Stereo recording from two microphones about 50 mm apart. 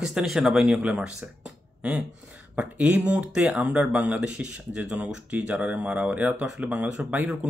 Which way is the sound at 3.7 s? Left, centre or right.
Right.